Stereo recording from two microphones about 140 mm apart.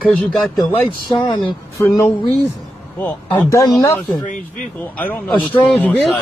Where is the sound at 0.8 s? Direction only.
35° left (ahead or behind).